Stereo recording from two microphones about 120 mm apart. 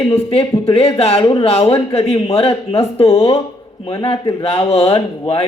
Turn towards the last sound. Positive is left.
turn(degrees=55)  # may be behind; listen again after turning